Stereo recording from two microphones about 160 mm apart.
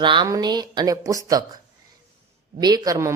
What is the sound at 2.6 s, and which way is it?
Speech, 25° right (ahead or behind).